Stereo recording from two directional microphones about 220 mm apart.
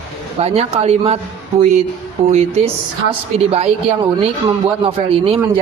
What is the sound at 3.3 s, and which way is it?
A man's voice, 30° right (ahead or behind).